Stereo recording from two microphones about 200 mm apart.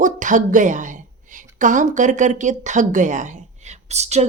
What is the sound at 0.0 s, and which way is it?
A woman's voice, 40° right (ahead or behind).